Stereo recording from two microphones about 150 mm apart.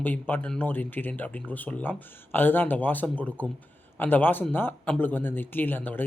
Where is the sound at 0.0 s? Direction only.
10° left (ahead or behind).